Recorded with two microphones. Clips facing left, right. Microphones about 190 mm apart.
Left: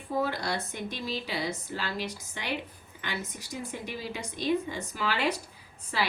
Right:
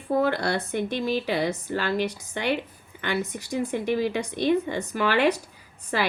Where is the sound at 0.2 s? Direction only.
65° right (ahead or behind).